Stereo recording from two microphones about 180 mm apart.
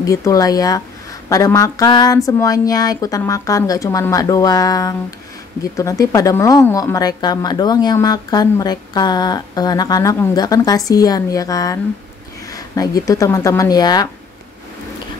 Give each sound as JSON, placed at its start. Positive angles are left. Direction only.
{"t": 0.0, "sound": "a woman's voice", "side_deg": 20}